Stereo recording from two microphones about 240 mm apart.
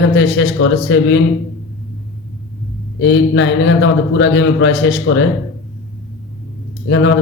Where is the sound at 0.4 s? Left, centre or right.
Left.